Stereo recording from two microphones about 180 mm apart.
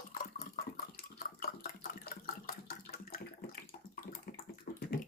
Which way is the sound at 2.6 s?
55° left (ahead or behind).